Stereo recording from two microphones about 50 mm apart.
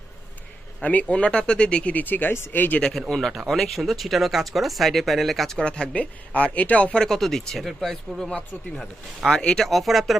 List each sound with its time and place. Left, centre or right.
0.8 s speech: left
3.1 s speech: centre
5.6 s speech: centre
7.0 s speech: centre